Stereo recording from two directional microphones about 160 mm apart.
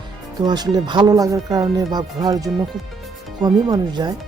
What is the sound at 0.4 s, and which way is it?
Speech, 25° right (ahead or behind).